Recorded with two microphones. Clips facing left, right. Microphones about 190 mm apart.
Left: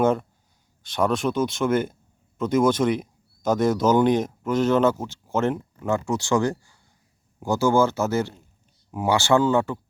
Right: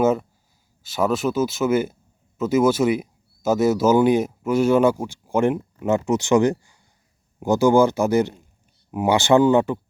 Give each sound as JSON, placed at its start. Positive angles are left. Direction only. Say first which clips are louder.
{"t": 0.0, "sound": "speech", "louder": "right 2 dB", "side_deg": -5}